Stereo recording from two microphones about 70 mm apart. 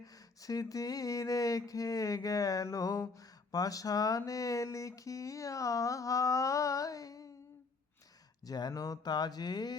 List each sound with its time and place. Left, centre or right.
0.0 s a sound: left
4.3 s speech: left
8.4 s speech: left